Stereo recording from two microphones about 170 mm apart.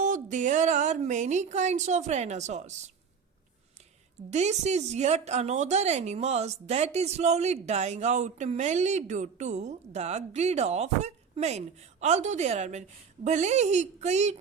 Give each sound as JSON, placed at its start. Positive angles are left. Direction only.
{"t": 0.0, "sound": "speech", "side_deg": -45}
{"t": 4.3, "sound": "a woman's voice", "side_deg": -40}